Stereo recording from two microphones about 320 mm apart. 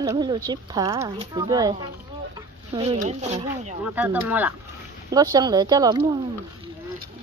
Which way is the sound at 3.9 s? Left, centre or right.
Centre.